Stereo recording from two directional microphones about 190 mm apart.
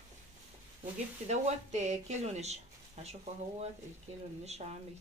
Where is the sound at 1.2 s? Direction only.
35° right (ahead or behind).